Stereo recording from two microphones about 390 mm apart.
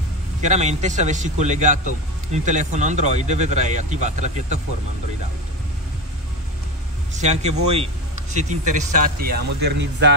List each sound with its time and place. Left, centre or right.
0.4 s speech: centre
7.2 s speech: centre